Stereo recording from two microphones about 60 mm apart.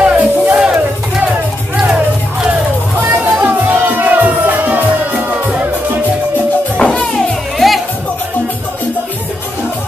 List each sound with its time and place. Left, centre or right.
0.0 s music: right
0.6 s music: centre
3.0 s music: right
6.8 s music: centre
7.5 s music: centre